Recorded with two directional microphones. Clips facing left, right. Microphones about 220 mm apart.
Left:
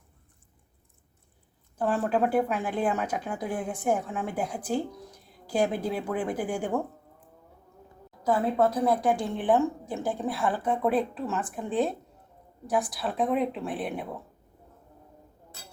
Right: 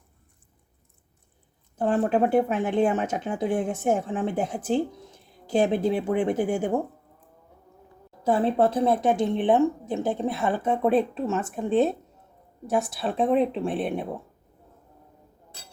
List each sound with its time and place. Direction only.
1.7 s speech: 20° right (ahead or behind)
8.2 s speech: 30° right (ahead or behind)